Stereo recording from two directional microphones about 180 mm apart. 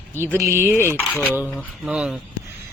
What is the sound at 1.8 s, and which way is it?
Speech, 5° right (ahead or behind).